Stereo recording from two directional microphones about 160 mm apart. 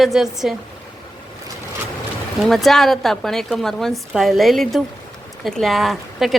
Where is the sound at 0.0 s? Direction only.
Centre (ahead or behind).